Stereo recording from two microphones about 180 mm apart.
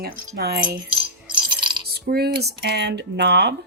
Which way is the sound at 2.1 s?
65° right (ahead or behind).